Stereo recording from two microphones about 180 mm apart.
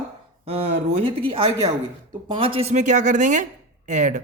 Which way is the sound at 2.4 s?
30° right (ahead or behind).